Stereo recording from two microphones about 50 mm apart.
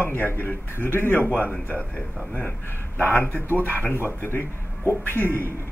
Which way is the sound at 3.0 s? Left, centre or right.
Left.